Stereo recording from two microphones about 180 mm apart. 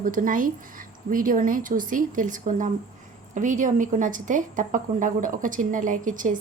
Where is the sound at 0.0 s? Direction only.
50° right (ahead or behind).